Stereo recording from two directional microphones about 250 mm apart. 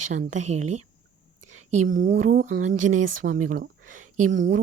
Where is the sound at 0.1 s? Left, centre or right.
Right.